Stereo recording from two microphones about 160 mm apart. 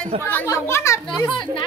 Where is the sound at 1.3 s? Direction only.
30° left (ahead or behind).